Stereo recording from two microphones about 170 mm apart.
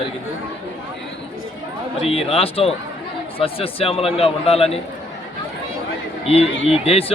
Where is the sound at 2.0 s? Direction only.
35° left (ahead or behind).